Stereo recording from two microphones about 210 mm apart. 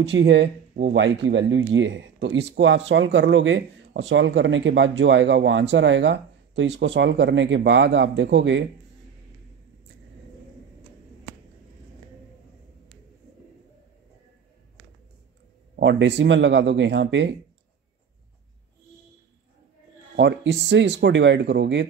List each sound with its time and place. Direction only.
0.0 s speech: 55° right (ahead or behind)
15.7 s speech: 55° right (ahead or behind)
20.2 s speech: 55° right (ahead or behind)